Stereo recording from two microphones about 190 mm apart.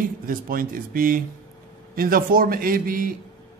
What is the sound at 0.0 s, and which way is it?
A man's voice, 45° right (ahead or behind).